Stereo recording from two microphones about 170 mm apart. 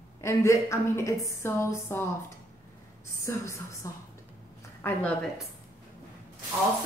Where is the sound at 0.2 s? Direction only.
15° left (ahead or behind).